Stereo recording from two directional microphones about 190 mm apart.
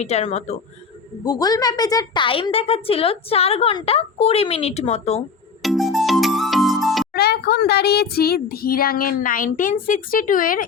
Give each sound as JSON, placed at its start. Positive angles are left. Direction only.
{"t": 0.0, "sound": "a woman's voice", "side_deg": 35}
{"t": 1.2, "sound": "a woman's voice", "side_deg": 20}
{"t": 5.6, "sound": "music", "side_deg": 0}
{"t": 7.1, "sound": "speech", "side_deg": 55}